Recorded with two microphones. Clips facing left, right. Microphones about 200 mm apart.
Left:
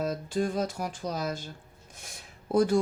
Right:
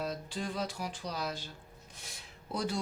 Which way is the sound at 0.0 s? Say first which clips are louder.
Left 8 dB; 45° left (ahead or behind).